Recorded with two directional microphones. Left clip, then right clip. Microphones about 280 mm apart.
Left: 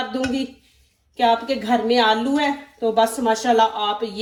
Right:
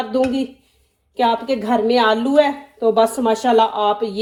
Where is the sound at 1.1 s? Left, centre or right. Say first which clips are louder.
Right 1 dB; centre.